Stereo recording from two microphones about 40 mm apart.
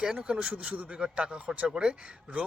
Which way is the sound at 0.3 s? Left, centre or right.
Right.